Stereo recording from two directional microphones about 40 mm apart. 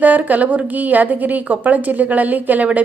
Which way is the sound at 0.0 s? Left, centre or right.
Right.